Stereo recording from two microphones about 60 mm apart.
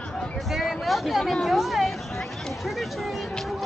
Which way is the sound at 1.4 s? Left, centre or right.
Centre.